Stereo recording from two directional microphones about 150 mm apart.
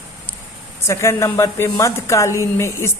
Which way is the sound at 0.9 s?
20° left (ahead or behind).